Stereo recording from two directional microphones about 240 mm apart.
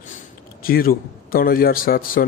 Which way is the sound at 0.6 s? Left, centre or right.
Left.